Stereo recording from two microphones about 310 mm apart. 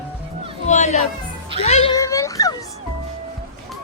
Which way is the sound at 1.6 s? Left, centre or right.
Centre.